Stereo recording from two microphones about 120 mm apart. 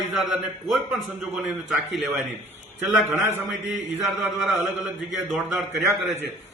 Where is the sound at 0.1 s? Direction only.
Centre (ahead or behind).